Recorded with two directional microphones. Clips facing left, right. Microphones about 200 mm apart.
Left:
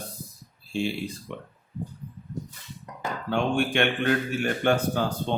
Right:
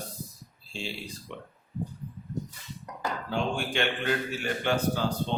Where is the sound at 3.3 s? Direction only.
60° left (ahead or behind).